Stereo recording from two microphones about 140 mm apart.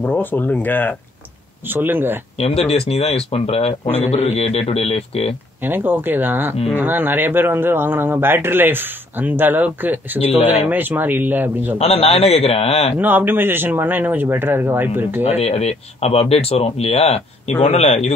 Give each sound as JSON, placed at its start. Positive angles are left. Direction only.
{"t": 0.0, "sound": "speech", "side_deg": 15}
{"t": 1.7, "sound": "speech", "side_deg": -15}
{"t": 2.3, "sound": "speech", "side_deg": 45}
{"t": 5.6, "sound": "speech", "side_deg": -15}
{"t": 11.8, "sound": "speech", "side_deg": 45}
{"t": 13.0, "sound": "speech", "side_deg": -15}
{"t": 15.2, "sound": "speech", "side_deg": 50}